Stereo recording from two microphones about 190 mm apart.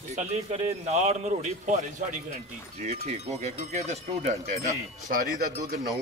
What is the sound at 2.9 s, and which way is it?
A man's voice, 35° right (ahead or behind).